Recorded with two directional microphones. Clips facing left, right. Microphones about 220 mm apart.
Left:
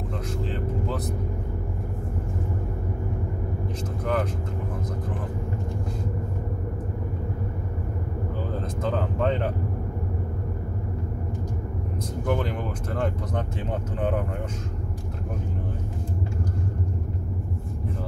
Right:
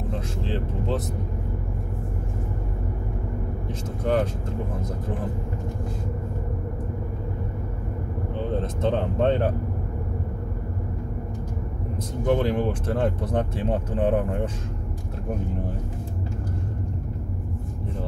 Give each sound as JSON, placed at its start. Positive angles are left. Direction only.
{"t": 4.0, "sound": "speech", "side_deg": -30}
{"t": 8.8, "sound": "speech", "side_deg": -30}
{"t": 12.3, "sound": "speech", "side_deg": -30}